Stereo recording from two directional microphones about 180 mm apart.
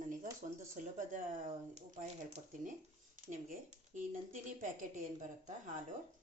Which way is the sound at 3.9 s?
45° right (ahead or behind).